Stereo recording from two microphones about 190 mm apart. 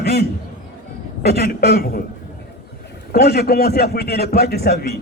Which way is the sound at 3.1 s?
55° left (ahead or behind).